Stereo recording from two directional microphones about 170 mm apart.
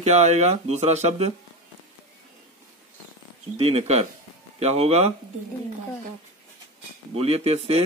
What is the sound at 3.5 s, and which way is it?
Speech, 35° right (ahead or behind).